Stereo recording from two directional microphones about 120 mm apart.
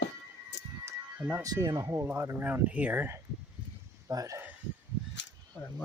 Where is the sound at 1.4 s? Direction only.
30° right (ahead or behind); by 3.1 s 15° right (ahead or behind).